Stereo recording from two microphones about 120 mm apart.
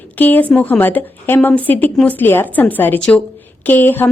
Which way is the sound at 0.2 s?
15° left (ahead or behind).